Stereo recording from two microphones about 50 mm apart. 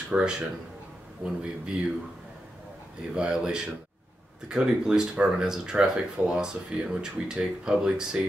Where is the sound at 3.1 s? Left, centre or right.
Centre.